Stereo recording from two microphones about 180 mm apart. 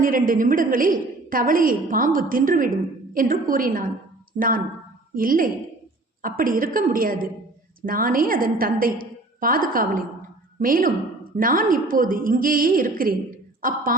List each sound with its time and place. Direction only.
0.0 s a woman's voice: 50° right (ahead or behind)